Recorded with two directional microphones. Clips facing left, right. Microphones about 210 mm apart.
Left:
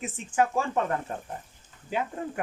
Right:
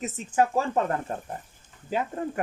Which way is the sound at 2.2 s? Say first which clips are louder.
Right 3 dB; 45° right (ahead or behind).